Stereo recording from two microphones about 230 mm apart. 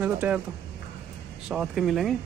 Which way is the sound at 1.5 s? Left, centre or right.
Centre.